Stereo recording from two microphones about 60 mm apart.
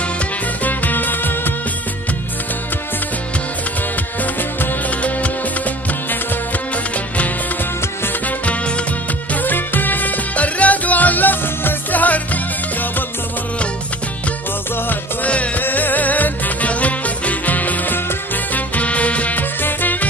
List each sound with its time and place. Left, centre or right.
0.7 s music: left
8.5 s music: centre
9.3 s music: left
14.9 s music: left